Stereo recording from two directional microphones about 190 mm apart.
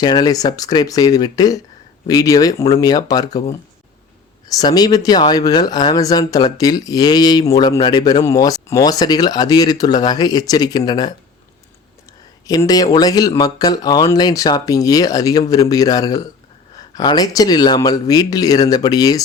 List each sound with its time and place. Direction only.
0.0 s speech: 20° left (ahead or behind)
4.5 s speech: 20° left (ahead or behind)
12.5 s speech: 20° left (ahead or behind)